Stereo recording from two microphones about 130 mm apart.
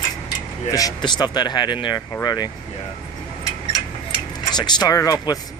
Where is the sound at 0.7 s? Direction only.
30° left (ahead or behind).